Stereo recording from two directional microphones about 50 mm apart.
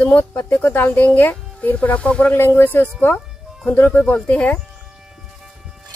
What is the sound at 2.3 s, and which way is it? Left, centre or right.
Speech, left.